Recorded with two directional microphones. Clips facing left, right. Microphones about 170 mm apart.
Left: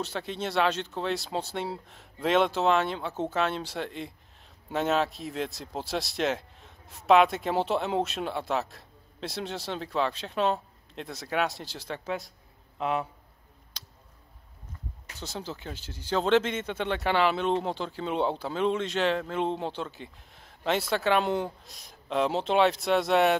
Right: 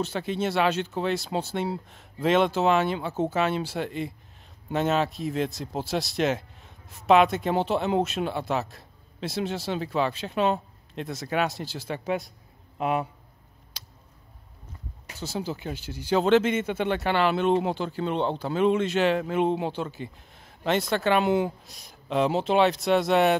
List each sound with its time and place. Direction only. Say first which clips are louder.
0.0 s speech: right 5 dB; centre (ahead or behind)
12.0 s a man's voice: right 7 dB; 15° right (ahead or behind)
13.7 s a sound: right 2 dB; 10° right (ahead or behind)
15.1 s speech: right 6 dB; 5° right (ahead or behind)